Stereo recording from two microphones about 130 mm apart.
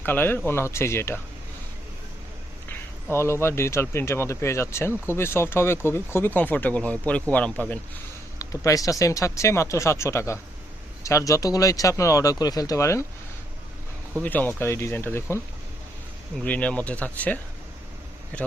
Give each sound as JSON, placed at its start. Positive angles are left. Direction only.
{"t": 0.0, "sound": "speech", "side_deg": 15}
{"t": 2.6, "sound": "a sound", "side_deg": 20}
{"t": 3.4, "sound": "speech", "side_deg": 20}
{"t": 8.4, "sound": "speech", "side_deg": 25}
{"t": 14.2, "sound": "speech", "side_deg": 15}
{"t": 16.4, "sound": "speech", "side_deg": 10}